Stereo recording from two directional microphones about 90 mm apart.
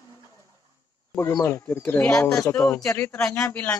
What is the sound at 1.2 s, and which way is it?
Speech, 30° left (ahead or behind).